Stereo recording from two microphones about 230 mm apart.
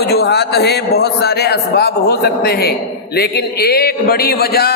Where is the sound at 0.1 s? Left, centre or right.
Left.